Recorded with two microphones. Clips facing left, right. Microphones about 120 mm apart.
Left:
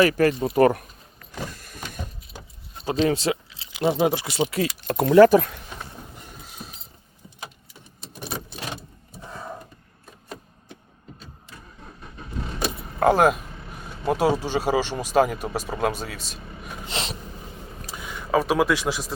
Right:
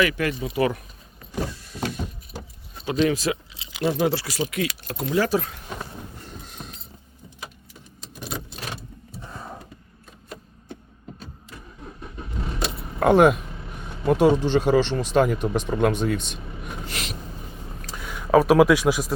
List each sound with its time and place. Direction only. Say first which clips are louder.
0.0 s speech: left 4 dB; 40° left (ahead or behind)
1.5 s mechanisms: right 3 dB; 50° left (ahead or behind)
2.8 s speech: even; 30° left (ahead or behind)
3.8 s speech: left 1 dB; 20° left (ahead or behind)
5.0 s speech: left 9 dB; 55° left (ahead or behind)
6.2 s vehicle: right 2 dB; 5° left (ahead or behind)
13.0 s speech: right 2 dB; centre (ahead or behind)
16.8 s a sound: left 5 dB; 25° left (ahead or behind)
18.1 s a sound: right 5 dB; 5° right (ahead or behind)
18.6 s speech: right 5 dB; 10° right (ahead or behind)